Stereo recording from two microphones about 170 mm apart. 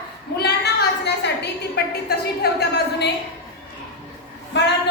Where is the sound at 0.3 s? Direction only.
75° left (ahead or behind).